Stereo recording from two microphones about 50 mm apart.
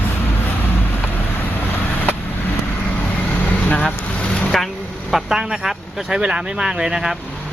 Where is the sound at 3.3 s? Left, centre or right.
Left.